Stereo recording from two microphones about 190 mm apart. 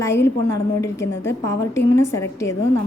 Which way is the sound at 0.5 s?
15° left (ahead or behind).